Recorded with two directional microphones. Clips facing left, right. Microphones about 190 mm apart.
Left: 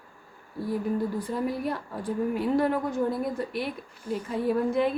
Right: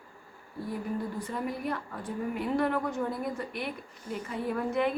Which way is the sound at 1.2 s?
35° left (ahead or behind).